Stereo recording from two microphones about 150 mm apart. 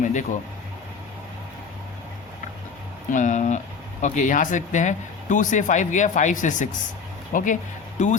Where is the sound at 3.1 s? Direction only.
55° left (ahead or behind).